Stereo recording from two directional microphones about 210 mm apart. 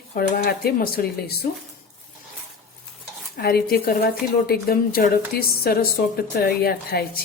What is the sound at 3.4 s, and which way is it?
Speech, 50° left (ahead or behind).